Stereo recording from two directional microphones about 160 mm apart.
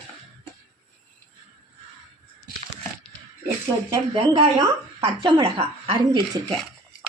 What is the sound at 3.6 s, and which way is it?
Speech, 30° right (ahead or behind).